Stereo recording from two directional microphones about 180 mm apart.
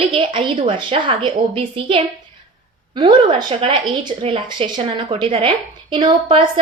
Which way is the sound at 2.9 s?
30° right (ahead or behind).